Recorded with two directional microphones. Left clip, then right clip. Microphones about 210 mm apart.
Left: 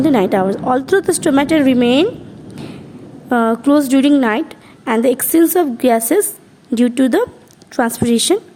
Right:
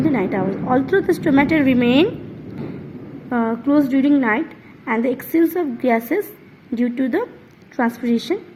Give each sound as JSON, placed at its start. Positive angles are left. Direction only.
{"t": 0.0, "sound": "speech", "side_deg": 55}
{"t": 3.2, "sound": "a woman's voice", "side_deg": 60}